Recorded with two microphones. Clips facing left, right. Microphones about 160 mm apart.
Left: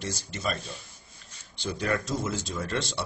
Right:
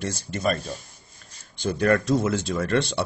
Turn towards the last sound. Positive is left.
turn(degrees=-60)  # may be behind; listen again after turning